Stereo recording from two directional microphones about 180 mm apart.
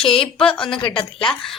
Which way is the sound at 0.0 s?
30° left (ahead or behind).